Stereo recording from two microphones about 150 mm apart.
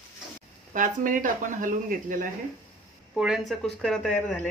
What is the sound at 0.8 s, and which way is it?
Speech, 60° right (ahead or behind).